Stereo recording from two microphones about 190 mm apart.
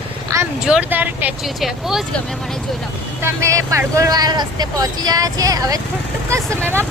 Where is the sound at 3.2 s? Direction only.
15° right (ahead or behind).